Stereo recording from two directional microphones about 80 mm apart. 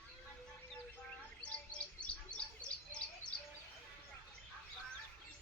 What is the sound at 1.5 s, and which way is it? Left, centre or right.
Bird, centre.